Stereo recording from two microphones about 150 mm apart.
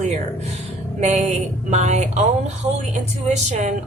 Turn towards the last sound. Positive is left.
turn(degrees=-50)  # may be behind; listen again after turning